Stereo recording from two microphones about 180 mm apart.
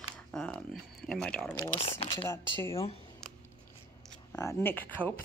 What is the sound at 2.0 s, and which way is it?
Speech, 20° left (ahead or behind).